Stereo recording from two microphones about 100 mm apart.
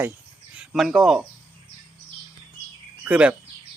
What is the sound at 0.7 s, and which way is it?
Speech, centre (ahead or behind).